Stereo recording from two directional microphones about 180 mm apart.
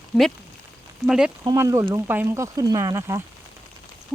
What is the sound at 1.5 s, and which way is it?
Speech, 20° right (ahead or behind).